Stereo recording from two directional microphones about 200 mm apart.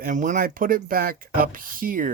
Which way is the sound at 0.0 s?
40° right (ahead or behind).